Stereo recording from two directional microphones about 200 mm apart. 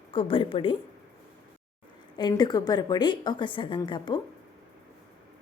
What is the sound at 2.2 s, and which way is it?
A woman's voice, 20° left (ahead or behind).